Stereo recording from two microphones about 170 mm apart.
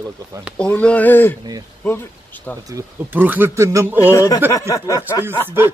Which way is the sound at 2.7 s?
10° right (ahead or behind).